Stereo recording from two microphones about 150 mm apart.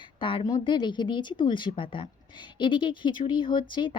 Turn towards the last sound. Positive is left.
turn(degrees=35)  # may be behind; listen again after turning